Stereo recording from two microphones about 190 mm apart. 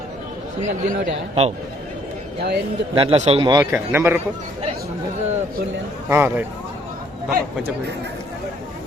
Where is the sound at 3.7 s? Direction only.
10° right (ahead or behind).